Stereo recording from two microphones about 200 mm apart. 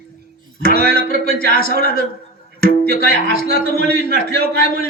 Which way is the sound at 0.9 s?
45° left (ahead or behind).